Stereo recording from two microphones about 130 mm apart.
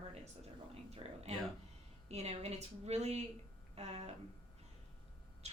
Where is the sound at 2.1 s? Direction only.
55° right (ahead or behind).